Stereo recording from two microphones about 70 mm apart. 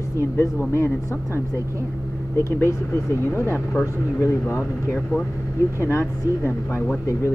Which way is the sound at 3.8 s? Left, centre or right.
Left.